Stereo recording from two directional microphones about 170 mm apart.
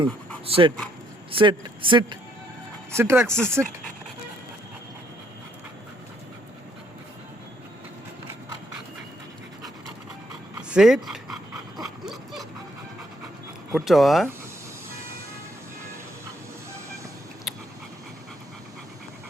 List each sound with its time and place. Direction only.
0.4 s speech: 35° right (ahead or behind)
2.9 s speech: 15° right (ahead or behind)
10.7 s speech: 5° right (ahead or behind)
11.8 s dog: centre (ahead or behind)
13.7 s speech: centre (ahead or behind)
17.5 s pant: centre (ahead or behind)